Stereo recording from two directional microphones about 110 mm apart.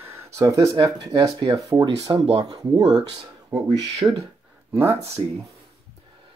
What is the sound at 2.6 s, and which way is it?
Speech, 40° right (ahead or behind).